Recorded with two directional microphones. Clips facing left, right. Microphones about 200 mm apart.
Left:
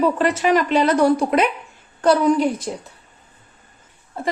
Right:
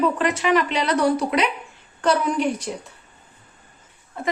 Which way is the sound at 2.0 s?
35° left (ahead or behind).